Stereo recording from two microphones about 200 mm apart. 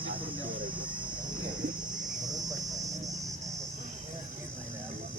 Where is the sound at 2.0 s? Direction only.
20° right (ahead or behind).